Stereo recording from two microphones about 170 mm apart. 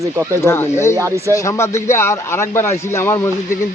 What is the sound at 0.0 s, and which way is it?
Speech, 15° right (ahead or behind).